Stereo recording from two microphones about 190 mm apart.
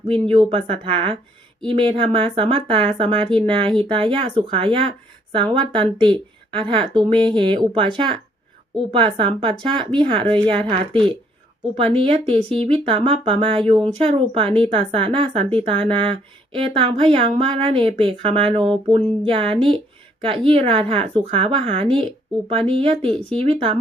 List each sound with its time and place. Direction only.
0.3 s speech: 30° right (ahead or behind)